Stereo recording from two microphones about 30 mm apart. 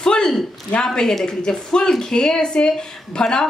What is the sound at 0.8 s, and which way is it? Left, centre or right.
Speech, left.